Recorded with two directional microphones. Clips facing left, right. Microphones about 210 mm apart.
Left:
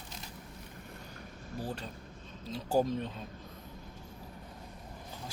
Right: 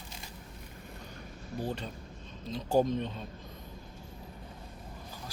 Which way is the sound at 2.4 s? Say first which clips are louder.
Right 2 dB; 5° left (ahead or behind).